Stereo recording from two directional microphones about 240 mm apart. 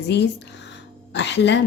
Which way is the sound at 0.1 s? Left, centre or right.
Left.